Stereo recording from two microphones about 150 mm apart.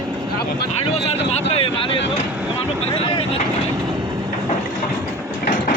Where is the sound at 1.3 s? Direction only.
45° left (ahead or behind).